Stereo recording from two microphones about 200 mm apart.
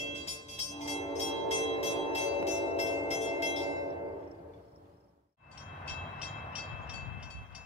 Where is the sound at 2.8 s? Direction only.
35° left (ahead or behind).